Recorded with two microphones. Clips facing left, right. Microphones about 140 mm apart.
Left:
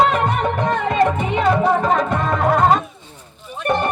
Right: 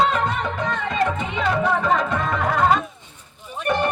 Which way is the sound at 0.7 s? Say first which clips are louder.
Left 5 dB; 55° left (ahead or behind).